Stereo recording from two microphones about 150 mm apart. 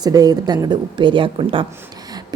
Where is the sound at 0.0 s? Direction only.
25° right (ahead or behind).